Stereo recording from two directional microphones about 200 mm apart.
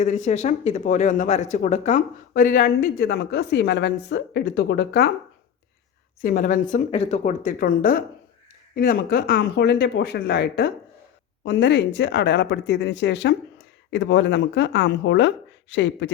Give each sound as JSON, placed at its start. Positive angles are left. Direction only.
{"t": 0.0, "sound": "speech", "side_deg": 35}
{"t": 6.2, "sound": "speech", "side_deg": 45}